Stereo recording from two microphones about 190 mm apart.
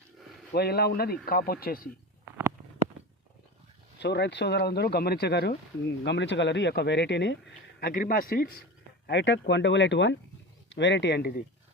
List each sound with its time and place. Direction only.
0.5 s speech: 55° left (ahead or behind)
4.0 s speech: 65° left (ahead or behind)
7.8 s speech: 50° left (ahead or behind)
9.0 s speech: 70° left (ahead or behind)